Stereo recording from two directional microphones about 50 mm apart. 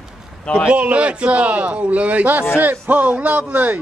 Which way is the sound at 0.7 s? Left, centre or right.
Right.